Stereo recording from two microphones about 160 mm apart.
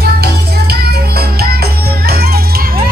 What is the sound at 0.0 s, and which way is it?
Music, 75° right (ahead or behind).